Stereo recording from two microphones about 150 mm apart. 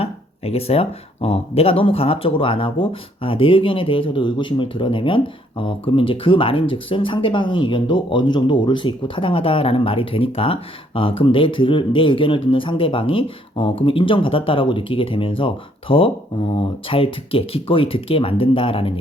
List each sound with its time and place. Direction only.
0.0 s speech: 40° left (ahead or behind)